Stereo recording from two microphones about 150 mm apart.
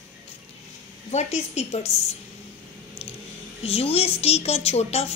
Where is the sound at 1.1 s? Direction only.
50° left (ahead or behind).